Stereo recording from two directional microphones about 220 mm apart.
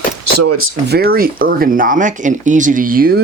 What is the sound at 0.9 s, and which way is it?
Speech, 45° right (ahead or behind).